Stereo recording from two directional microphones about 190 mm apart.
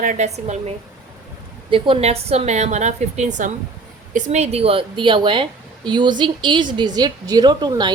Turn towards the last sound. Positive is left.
turn(degrees=-20)  # may be behind; listen again after turning